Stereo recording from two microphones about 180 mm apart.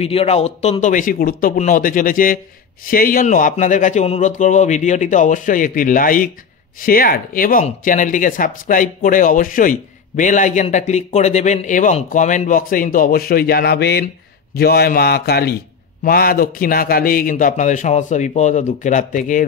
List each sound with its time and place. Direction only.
0.0 s speech: 35° left (ahead or behind)